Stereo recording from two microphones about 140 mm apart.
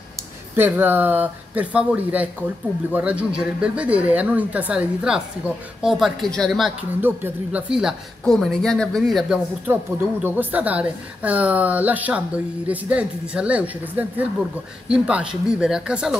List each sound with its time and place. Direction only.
0.6 s a woman's voice: 15° right (ahead or behind); by 6.7 s 5° left (ahead or behind)
7.0 s speech: 10° right (ahead or behind)
9.7 s a woman's voice: 15° right (ahead or behind)